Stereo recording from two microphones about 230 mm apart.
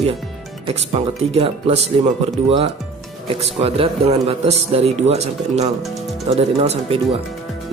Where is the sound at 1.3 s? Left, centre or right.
Right.